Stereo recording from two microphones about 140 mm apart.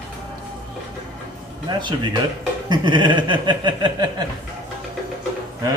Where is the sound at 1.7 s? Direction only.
30° right (ahead or behind).